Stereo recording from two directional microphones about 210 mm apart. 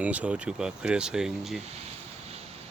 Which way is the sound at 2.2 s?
30° right (ahead or behind).